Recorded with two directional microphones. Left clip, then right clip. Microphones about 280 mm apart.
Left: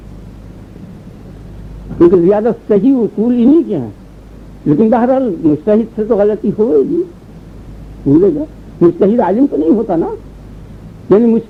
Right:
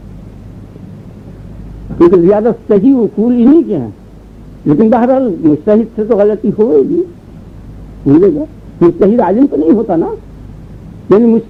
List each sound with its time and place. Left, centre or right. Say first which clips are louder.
2.1 s speech: right 2 dB; right
8.2 s speech: right 2 dB; right